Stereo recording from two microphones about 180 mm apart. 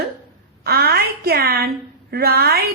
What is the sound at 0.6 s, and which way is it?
A woman's voice, 60° right (ahead or behind).